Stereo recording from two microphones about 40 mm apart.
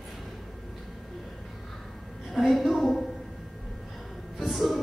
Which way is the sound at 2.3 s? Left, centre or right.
Centre.